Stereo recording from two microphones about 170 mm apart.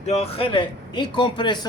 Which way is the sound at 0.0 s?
40° left (ahead or behind).